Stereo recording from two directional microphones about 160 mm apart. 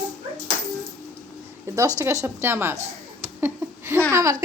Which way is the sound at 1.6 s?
20° right (ahead or behind).